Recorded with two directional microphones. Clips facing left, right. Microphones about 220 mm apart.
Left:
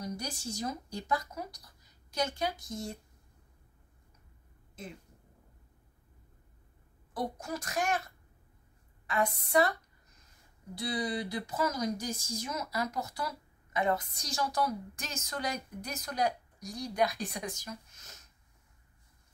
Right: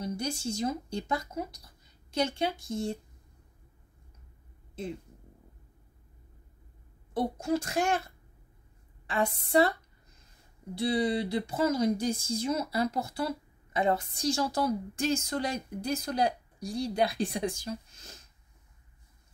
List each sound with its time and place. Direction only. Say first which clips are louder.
0.0 s speech: right 6 dB; 25° right (ahead or behind)
7.2 s speech: right 7 dB; 25° right (ahead or behind)